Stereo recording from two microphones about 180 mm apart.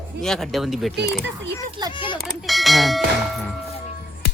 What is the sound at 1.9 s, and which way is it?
Speech, 25° left (ahead or behind).